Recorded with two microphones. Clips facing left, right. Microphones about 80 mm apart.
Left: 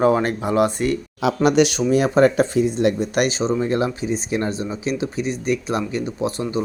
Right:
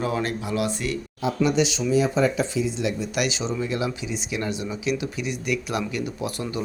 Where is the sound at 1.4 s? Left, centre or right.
Left.